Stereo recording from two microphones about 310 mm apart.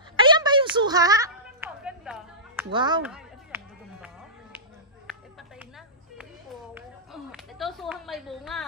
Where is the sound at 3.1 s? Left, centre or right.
Centre.